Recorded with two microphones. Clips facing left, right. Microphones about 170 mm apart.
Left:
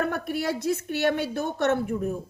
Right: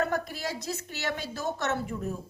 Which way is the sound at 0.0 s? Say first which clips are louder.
Left 3 dB; 60° left (ahead or behind).